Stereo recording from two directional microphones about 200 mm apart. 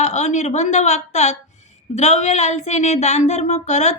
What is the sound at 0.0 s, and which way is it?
Speech, 35° left (ahead or behind).